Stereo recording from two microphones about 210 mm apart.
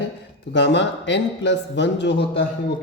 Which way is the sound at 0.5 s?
55° left (ahead or behind).